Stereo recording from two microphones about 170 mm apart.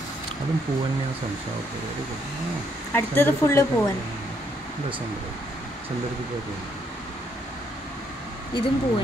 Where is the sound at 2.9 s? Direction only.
15° left (ahead or behind).